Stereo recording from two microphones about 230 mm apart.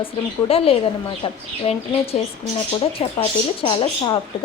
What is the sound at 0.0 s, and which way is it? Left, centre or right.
A woman's voice, left.